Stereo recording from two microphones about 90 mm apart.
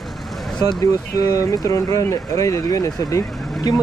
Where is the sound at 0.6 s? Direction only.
50° left (ahead or behind).